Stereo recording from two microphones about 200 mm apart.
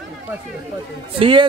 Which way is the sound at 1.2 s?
25° right (ahead or behind).